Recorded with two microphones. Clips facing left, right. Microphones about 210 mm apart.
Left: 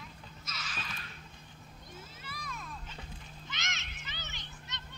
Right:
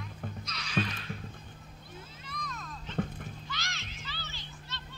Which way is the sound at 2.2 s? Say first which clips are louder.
Right 3 dB; 5° left (ahead or behind).